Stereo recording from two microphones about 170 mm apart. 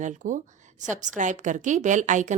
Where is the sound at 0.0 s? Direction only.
45° right (ahead or behind).